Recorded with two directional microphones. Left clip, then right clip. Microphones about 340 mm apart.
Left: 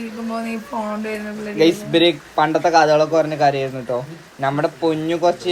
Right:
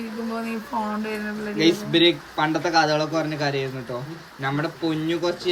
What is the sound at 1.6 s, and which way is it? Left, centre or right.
A man's voice, centre.